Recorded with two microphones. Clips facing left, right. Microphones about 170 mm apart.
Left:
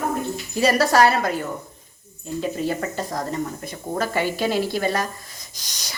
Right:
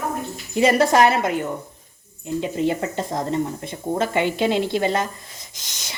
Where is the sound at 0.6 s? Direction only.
20° right (ahead or behind).